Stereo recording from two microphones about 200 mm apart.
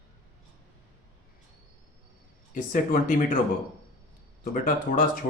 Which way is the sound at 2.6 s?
40° left (ahead or behind).